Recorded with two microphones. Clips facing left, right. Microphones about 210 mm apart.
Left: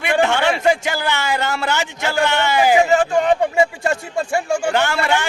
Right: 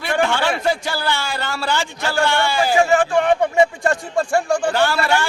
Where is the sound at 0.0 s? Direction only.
20° left (ahead or behind).